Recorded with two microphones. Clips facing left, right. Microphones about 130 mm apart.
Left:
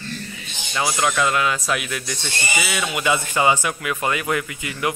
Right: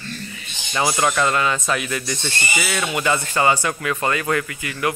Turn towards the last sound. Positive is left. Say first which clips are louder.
# right 1 dB
turn(degrees=20)  # may be behind; listen again after turning